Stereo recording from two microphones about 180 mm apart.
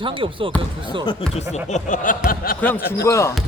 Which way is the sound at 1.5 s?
45° left (ahead or behind).